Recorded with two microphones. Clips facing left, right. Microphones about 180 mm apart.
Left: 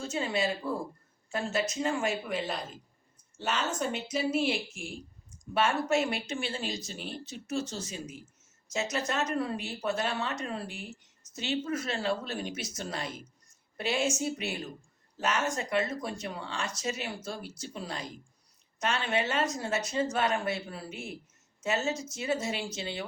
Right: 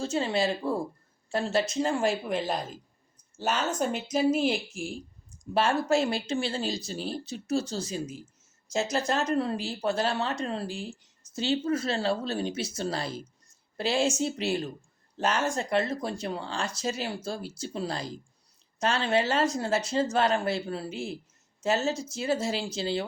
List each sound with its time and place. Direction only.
0.0 s speech: 30° right (ahead or behind)
3.3 s a woman's voice: 40° right (ahead or behind)